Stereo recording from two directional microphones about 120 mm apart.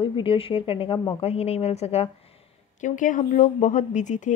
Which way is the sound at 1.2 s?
60° left (ahead or behind).